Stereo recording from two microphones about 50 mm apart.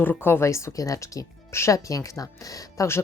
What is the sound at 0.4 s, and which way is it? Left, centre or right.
Speech, left.